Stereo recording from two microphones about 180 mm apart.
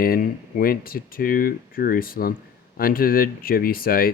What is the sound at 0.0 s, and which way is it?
Speech, 55° left (ahead or behind).